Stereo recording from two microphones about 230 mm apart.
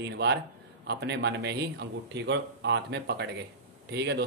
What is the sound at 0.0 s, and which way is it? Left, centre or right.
Speech, right.